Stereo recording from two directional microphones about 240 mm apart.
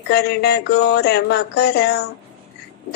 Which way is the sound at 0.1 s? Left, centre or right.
Left.